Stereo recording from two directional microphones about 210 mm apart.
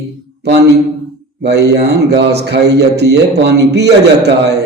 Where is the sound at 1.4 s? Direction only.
50° right (ahead or behind).